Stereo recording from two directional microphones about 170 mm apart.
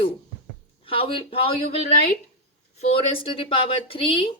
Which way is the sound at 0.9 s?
30° left (ahead or behind).